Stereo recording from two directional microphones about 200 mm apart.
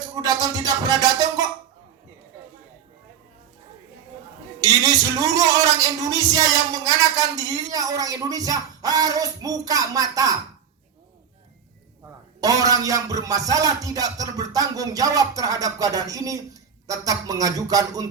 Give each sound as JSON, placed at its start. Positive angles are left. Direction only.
{"t": 0.2, "sound": "speech", "side_deg": -20}
{"t": 4.6, "sound": "a sound", "side_deg": -20}
{"t": 6.1, "sound": "a man's voice", "side_deg": -15}
{"t": 12.4, "sound": "a man's voice", "side_deg": -20}